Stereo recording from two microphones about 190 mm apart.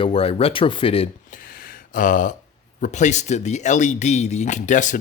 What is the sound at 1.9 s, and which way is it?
Speech, 45° left (ahead or behind).